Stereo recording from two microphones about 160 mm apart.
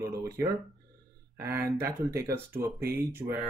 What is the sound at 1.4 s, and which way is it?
Speech, 15° right (ahead or behind).